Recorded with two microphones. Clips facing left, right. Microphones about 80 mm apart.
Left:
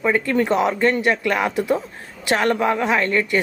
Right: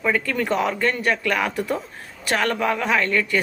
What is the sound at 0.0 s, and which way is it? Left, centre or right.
Speech, left.